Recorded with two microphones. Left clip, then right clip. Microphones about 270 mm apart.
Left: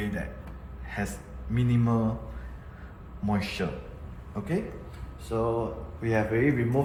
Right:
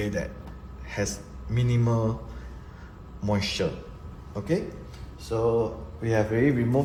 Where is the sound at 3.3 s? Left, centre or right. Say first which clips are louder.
Right 4 dB; right.